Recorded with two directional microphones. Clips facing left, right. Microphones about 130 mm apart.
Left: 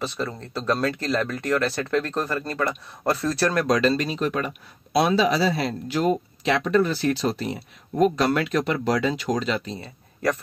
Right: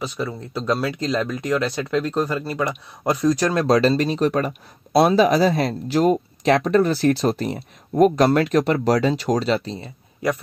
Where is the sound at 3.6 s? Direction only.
30° right (ahead or behind).